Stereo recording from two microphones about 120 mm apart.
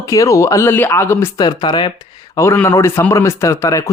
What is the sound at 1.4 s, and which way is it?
Speech, 35° left (ahead or behind).